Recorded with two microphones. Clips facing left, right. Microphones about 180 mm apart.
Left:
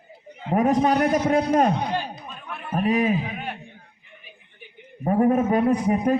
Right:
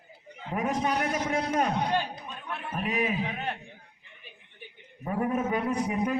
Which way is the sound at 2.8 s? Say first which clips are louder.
Left 8 dB; 40° left (ahead or behind).